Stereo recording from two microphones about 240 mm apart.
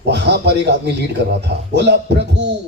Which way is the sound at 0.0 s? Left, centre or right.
Right.